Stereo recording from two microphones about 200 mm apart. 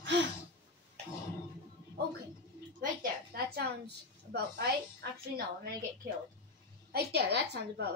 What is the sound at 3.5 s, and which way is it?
A woman's voice, 55° right (ahead or behind).